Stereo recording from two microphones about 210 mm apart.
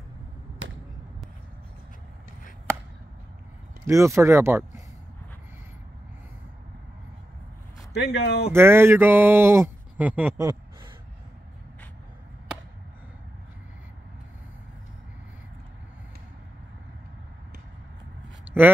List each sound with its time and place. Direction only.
3.8 s speech: 15° right (ahead or behind)
7.9 s speech: 50° left (ahead or behind)
8.5 s speech: 10° right (ahead or behind)
18.4 s a sound: 10° right (ahead or behind)